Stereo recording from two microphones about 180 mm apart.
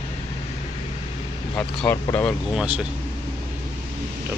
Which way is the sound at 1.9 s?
15° left (ahead or behind).